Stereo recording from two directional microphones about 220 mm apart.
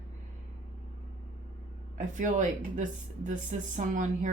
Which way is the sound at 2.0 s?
35° right (ahead or behind).